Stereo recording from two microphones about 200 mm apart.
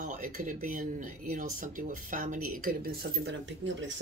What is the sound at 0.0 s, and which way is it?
Speech, 40° right (ahead or behind).